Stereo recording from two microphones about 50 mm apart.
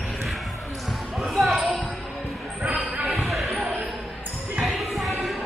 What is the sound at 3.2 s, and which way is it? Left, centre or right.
Basketball bounce, centre.